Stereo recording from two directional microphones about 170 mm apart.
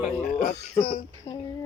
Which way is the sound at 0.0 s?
50° left (ahead or behind).